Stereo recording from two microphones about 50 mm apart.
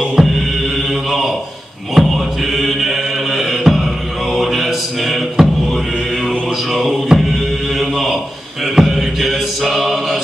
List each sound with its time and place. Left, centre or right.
0.2 s music: centre
2.0 s music: centre
4.3 s chant: centre
6.7 s music: centre
8.7 s chant: centre